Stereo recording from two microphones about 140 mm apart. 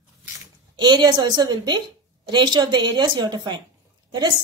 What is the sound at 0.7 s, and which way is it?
A woman's voice, 30° right (ahead or behind).